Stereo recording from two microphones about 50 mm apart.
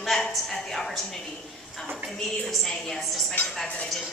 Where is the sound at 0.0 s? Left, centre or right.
Centre.